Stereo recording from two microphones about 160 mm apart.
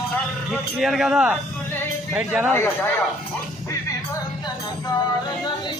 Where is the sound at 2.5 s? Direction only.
15° left (ahead or behind).